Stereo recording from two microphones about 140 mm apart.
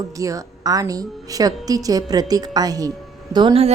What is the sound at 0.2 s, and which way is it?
A woman's voice, 25° right (ahead or behind).